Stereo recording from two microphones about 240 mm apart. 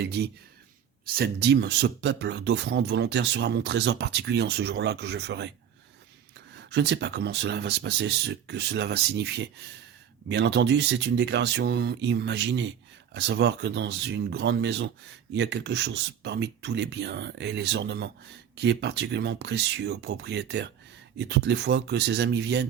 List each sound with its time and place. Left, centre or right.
1.1 s speech: right
6.7 s speech: right